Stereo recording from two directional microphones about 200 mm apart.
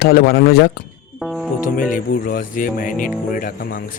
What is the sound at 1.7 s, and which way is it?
Speech, 40° left (ahead or behind).